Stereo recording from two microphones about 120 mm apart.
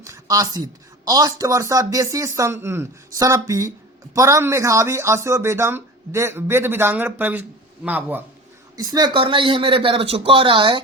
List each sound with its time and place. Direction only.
0.0 s speech: 30° right (ahead or behind)
8.7 s speech: 30° right (ahead or behind)